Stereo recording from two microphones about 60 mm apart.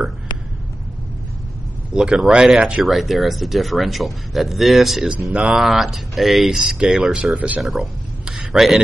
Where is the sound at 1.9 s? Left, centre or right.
Centre.